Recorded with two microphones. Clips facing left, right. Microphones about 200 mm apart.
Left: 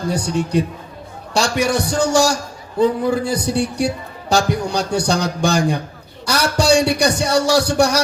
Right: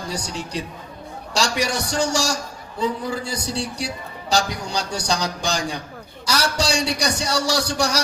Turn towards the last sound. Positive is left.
turn(degrees=55)  # may be behind; listen again after turning